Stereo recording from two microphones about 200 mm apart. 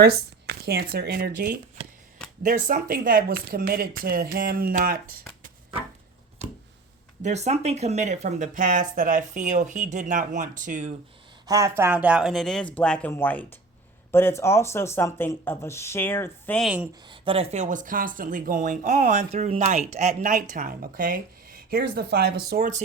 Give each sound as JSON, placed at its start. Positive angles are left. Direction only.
{"t": 0.0, "sound": "speech", "side_deg": -50}
{"t": 6.4, "sound": "a sound", "side_deg": -30}
{"t": 7.2, "sound": "speech", "side_deg": -35}
{"t": 11.4, "sound": "speech", "side_deg": -15}
{"t": 16.6, "sound": "speech", "side_deg": -5}
{"t": 17.1, "sound": "speech", "side_deg": -25}